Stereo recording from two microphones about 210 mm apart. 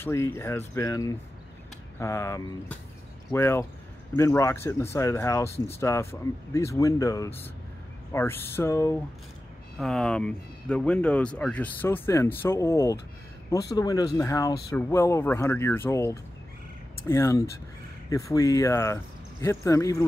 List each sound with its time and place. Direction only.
0.0 s speech: 10° left (ahead or behind)